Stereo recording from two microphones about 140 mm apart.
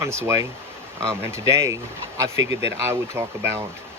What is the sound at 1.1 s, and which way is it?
Speech, 20° right (ahead or behind).